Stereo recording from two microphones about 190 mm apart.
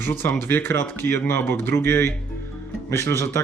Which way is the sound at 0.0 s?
10° left (ahead or behind).